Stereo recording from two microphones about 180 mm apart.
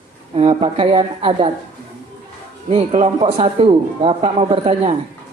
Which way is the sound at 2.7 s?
35° right (ahead or behind).